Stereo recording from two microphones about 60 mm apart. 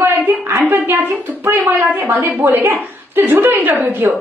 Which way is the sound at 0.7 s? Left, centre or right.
Right.